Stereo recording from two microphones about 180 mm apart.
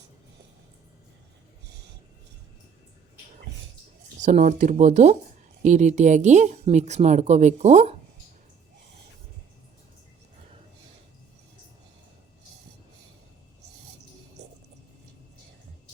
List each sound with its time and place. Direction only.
4.2 s speech: 40° right (ahead or behind)